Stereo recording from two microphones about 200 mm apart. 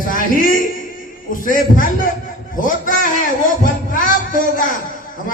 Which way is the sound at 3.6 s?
40° left (ahead or behind).